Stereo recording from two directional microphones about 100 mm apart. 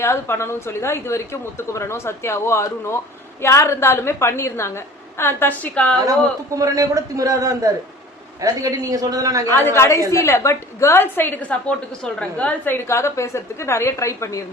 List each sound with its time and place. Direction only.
0.0 s a woman's voice: 25° left (ahead or behind)
6.1 s a man's voice: 35° right (ahead or behind)
9.6 s a woman's voice: 25° left (ahead or behind)